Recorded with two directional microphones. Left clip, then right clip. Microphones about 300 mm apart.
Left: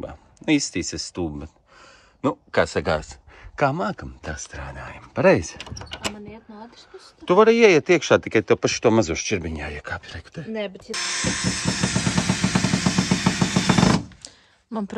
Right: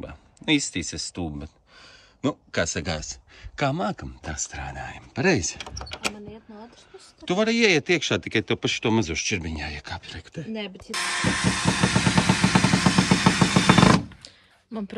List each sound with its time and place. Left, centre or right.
0.0 s speech: centre
7.2 s speech: centre